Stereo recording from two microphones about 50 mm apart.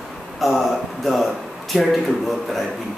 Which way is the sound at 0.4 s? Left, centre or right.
Centre.